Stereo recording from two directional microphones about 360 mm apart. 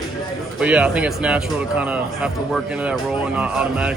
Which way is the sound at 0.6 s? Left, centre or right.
Centre.